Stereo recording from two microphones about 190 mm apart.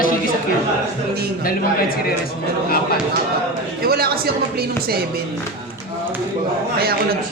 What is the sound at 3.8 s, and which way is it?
Speech, 55° right (ahead or behind).